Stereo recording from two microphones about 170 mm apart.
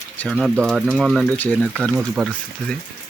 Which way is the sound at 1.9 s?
5° right (ahead or behind).